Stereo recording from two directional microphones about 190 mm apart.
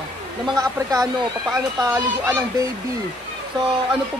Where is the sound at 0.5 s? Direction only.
20° right (ahead or behind).